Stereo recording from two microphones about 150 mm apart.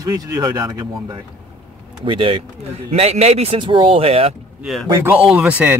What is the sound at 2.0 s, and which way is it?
Speech, 35° right (ahead or behind).